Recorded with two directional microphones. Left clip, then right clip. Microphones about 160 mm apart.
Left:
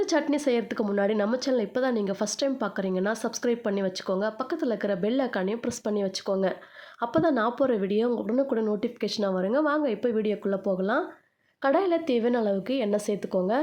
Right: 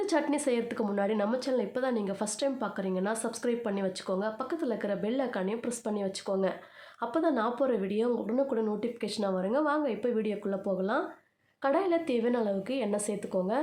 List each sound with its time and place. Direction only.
0.0 s speech: 25° left (ahead or behind)